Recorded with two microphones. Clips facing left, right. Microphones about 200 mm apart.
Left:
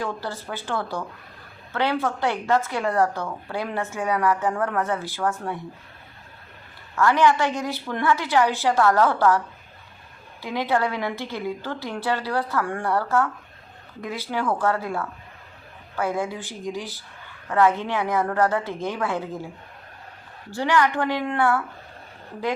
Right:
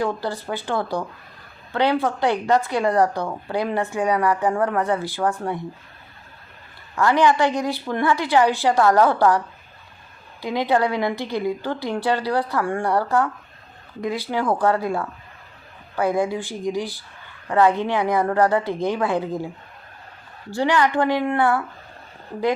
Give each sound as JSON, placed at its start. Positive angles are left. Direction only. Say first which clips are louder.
{"t": 0.0, "sound": "a woman's voice", "louder": "right 5 dB", "side_deg": -15}
{"t": 6.9, "sound": "a woman's voice", "louder": "right 1 dB", "side_deg": -15}
{"t": 10.4, "sound": "a woman's voice", "louder": "right 3 dB", "side_deg": -15}
{"t": 20.5, "sound": "a woman's voice", "louder": "right 2 dB", "side_deg": -15}